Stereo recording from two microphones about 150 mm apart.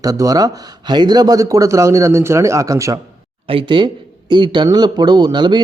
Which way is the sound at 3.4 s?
35° right (ahead or behind).